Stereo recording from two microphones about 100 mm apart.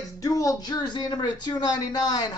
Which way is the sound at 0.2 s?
35° left (ahead or behind).